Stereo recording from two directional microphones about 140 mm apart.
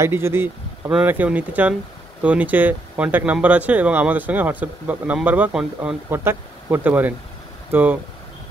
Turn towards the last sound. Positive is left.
turn(degrees=-10)  # may be behind; listen again after turning